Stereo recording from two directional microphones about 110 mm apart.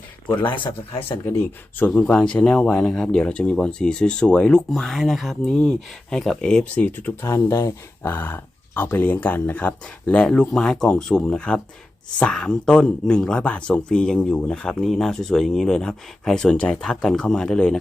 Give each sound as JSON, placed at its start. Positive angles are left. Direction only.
{"t": 0.5, "sound": "speech", "side_deg": 55}
{"t": 1.8, "sound": "speech", "side_deg": 10}